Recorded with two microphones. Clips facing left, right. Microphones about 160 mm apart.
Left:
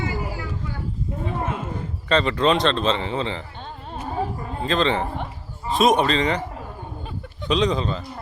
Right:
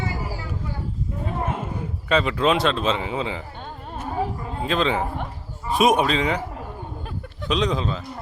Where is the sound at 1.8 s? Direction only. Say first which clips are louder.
Left 1 dB; 5° right (ahead or behind).